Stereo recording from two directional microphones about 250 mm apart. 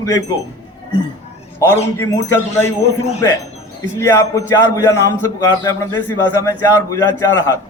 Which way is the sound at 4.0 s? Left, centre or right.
Centre.